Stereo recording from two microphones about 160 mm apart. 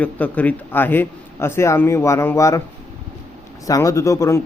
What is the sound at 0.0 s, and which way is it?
A man's voice, 10° left (ahead or behind).